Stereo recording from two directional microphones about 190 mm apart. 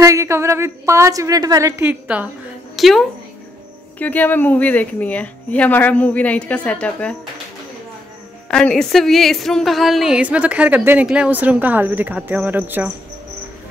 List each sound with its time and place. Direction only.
0.0 s a woman's voice: 15° right (ahead or behind)
2.7 s a sound: centre (ahead or behind)
4.0 s a woman's voice: 10° left (ahead or behind)
8.5 s a woman's voice: 5° left (ahead or behind)